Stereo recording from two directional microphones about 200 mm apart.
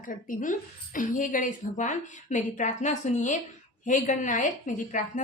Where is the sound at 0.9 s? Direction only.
40° left (ahead or behind).